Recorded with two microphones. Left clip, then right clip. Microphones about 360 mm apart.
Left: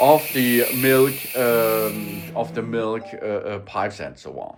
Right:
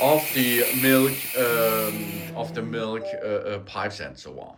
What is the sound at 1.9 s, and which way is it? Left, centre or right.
Speech, centre.